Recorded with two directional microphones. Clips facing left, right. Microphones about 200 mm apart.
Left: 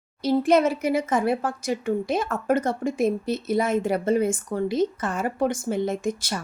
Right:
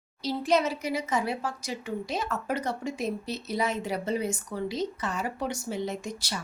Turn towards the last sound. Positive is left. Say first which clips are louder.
# left 8 dB
turn(degrees=50)  # may be behind; listen again after turning